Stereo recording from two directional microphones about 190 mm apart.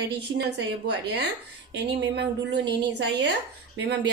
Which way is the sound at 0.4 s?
65° right (ahead or behind).